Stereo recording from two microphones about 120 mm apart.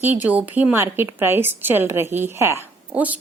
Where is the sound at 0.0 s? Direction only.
15° right (ahead or behind).